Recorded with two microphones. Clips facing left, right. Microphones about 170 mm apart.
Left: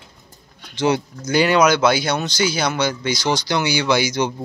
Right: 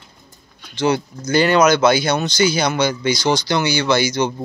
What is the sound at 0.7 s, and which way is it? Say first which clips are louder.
Speech: right 1 dB; 20° left (ahead or behind).